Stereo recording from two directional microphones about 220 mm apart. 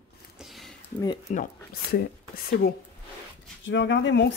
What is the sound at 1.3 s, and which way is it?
Speech, 35° left (ahead or behind).